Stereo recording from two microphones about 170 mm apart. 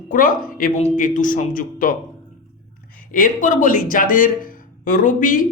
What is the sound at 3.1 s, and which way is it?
Speech, 50° left (ahead or behind).